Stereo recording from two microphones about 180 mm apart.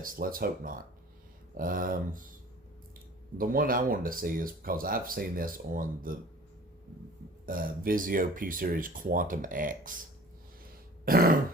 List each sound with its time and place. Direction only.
0.0 s speech: 50° right (ahead or behind)
3.3 s speech: 50° right (ahead or behind)
7.4 s speech: 50° right (ahead or behind)
11.0 s throat clearing: 55° right (ahead or behind)